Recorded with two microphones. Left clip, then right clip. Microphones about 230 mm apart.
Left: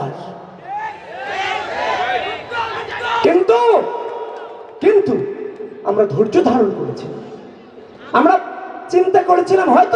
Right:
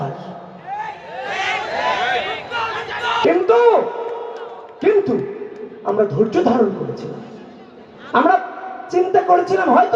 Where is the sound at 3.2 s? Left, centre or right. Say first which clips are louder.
Left 1 dB; left.